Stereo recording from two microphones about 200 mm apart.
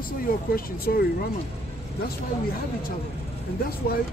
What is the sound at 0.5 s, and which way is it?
Speech, 50° left (ahead or behind).